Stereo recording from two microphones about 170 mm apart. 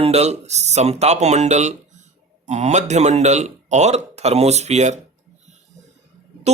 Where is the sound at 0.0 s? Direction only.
40° right (ahead or behind).